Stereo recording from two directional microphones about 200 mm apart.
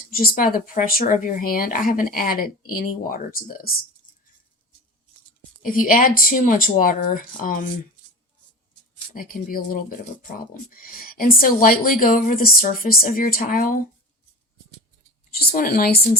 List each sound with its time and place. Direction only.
0.1 s speech: 45° left (ahead or behind)
5.6 s speech: 40° left (ahead or behind)
9.1 s speech: 45° left (ahead or behind)
15.4 s speech: 50° left (ahead or behind)